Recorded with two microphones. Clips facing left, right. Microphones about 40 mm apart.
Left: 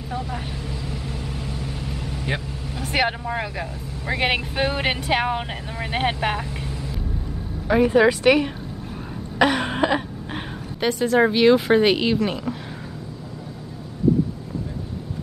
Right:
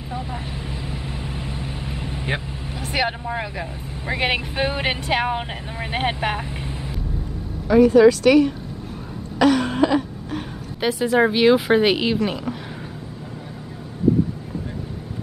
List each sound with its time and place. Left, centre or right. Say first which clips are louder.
1.5 s vehicle: even; right
2.9 s speech: left 1 dB; centre
7.6 s speech: right 4 dB; left
9.4 s a sound: right 2 dB; left
10.8 s speech: even; centre